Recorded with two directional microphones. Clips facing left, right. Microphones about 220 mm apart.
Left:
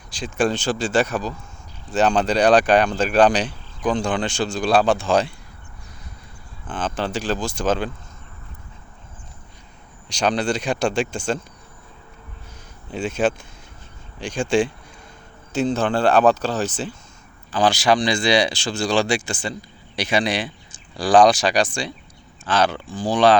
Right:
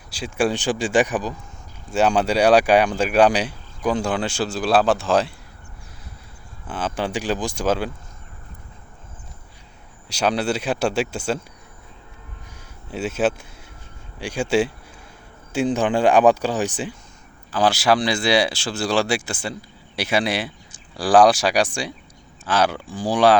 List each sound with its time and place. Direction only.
0.1 s speech: 10° right (ahead or behind)
6.7 s speech: 10° right (ahead or behind)
10.1 s speech: 5° right (ahead or behind)
12.9 s speech: 5° right (ahead or behind)